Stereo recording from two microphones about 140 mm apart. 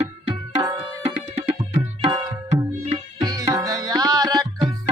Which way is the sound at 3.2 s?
25° right (ahead or behind).